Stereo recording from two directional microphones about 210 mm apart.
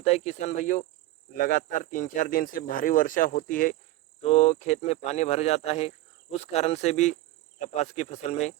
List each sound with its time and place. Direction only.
0.0 s speech: 30° left (ahead or behind)